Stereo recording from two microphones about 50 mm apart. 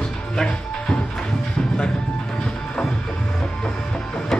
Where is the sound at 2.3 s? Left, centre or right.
Centre.